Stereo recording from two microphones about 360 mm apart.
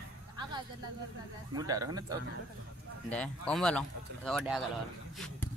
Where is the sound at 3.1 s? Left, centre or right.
Centre.